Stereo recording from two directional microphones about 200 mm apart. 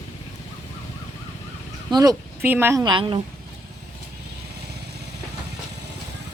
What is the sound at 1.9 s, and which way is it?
Speech, 15° right (ahead or behind).